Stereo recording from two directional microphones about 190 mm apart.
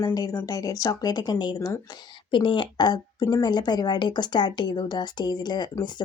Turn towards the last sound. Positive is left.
turn(degrees=20)  # may be behind; listen again after turning